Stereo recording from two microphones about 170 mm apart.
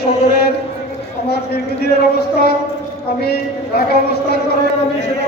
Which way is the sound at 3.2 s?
65° left (ahead or behind).